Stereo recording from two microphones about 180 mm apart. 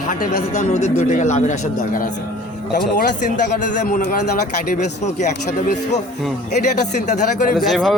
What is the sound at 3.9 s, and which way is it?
Speech, 50° left (ahead or behind).